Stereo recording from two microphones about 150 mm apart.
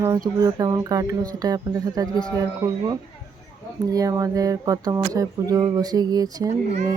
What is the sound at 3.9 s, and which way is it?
Speech, 25° right (ahead or behind).